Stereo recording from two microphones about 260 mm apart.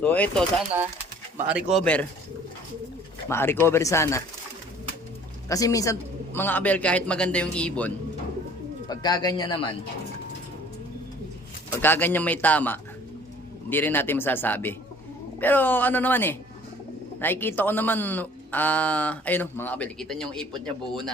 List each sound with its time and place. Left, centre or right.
0.0 s speech: centre
1.7 s speech: centre
3.2 s speech: centre
5.5 s speech: centre
8.9 s speech: centre
11.8 s speech: centre